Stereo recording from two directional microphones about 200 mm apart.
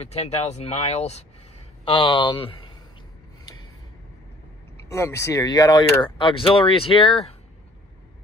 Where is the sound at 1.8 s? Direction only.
20° left (ahead or behind).